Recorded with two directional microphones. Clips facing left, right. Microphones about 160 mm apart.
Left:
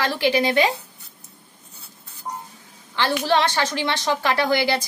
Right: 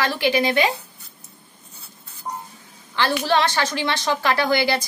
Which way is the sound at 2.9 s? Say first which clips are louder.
Even; 20° left (ahead or behind).